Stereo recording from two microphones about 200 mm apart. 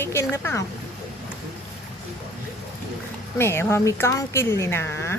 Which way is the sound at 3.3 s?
10° left (ahead or behind).